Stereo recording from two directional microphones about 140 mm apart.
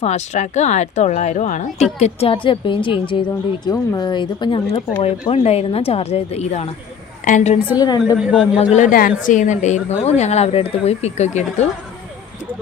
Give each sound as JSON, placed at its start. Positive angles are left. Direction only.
{"t": 0.0, "sound": "a woman's voice", "side_deg": 55}
{"t": 5.3, "sound": "a woman's voice", "side_deg": 50}
{"t": 7.8, "sound": "a woman's voice", "side_deg": 30}
{"t": 8.2, "sound": "a man's voice", "side_deg": -5}
{"t": 8.7, "sound": "a woman's voice", "side_deg": 70}